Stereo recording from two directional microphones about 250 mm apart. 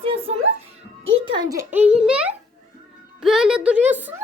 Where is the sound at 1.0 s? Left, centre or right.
Right; by 2.3 s centre.